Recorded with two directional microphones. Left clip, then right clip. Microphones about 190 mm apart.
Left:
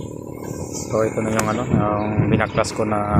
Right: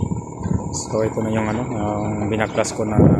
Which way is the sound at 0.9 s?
15° right (ahead or behind).